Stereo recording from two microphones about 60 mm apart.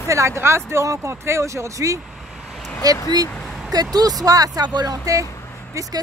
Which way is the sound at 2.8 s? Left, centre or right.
Right.